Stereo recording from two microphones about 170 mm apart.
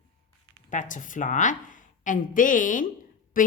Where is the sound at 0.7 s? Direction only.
50° left (ahead or behind).